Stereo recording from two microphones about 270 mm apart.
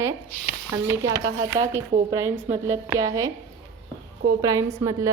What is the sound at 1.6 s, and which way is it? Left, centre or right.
Speech, right.